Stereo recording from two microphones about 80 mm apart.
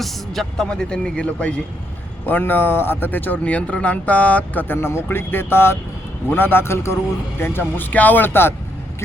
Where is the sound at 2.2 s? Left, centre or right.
Left.